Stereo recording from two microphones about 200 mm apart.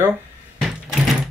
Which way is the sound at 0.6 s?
Centre (ahead or behind).